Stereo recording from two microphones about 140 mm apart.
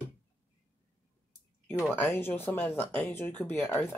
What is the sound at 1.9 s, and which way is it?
Speech, 15° left (ahead or behind).